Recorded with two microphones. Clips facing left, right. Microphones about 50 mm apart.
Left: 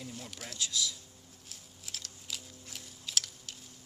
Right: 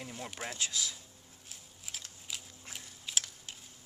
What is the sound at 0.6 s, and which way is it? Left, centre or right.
Speech, right.